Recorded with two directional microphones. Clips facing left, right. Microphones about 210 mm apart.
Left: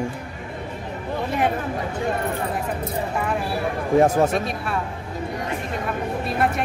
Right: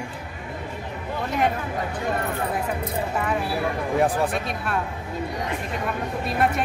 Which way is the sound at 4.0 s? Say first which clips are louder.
Left 4 dB; 40° left (ahead or behind).